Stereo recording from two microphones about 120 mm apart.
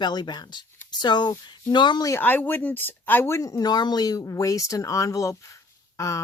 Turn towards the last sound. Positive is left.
turn(degrees=25)  # may be behind; listen again after turning